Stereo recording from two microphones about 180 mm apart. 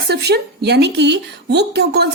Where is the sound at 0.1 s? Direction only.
65° right (ahead or behind).